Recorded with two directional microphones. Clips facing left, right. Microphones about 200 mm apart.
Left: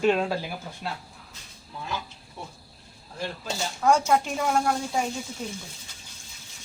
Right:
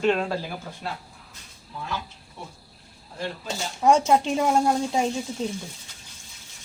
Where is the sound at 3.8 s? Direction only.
20° right (ahead or behind).